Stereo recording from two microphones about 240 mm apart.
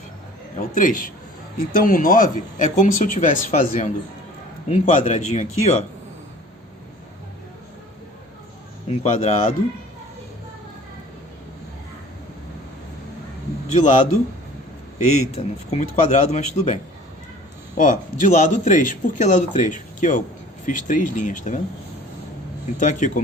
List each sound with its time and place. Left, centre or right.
0.5 s a man's voice: left
8.9 s speech: left
13.7 s a man's voice: left
15.3 s a man's voice: left
22.8 s a man's voice: left